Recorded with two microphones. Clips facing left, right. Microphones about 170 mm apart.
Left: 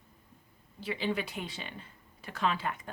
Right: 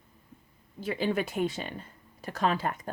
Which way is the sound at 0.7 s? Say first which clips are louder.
Right 4 dB; 45° right (ahead or behind).